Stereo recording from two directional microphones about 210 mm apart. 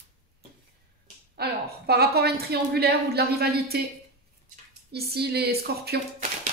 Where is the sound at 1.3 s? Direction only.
50° right (ahead or behind).